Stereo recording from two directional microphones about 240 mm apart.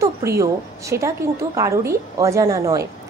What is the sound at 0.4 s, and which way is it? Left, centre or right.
A woman's voice, centre.